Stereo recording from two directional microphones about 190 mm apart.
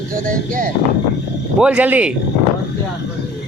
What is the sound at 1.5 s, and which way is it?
Speech, 5° right (ahead or behind).